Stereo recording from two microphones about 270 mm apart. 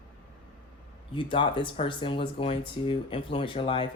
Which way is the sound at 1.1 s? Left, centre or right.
Centre.